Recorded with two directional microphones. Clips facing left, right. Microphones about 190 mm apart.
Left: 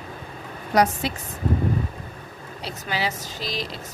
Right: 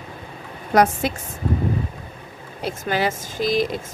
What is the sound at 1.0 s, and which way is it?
Speech, 50° right (ahead or behind).